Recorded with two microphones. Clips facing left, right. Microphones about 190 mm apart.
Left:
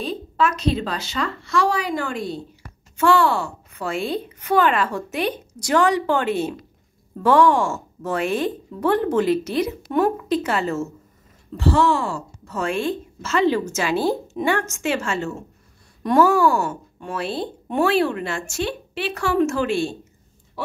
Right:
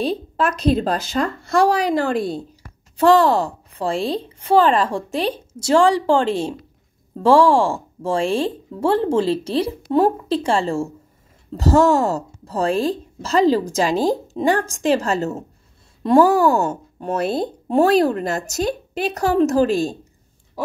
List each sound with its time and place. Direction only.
0.4 s a woman's voice: 50° right (ahead or behind)
1.7 s a woman's voice: 40° right (ahead or behind)
11.5 s a woman's voice: 40° right (ahead or behind)
16.2 s speech: 15° right (ahead or behind)
17.0 s a woman's voice: 45° right (ahead or behind)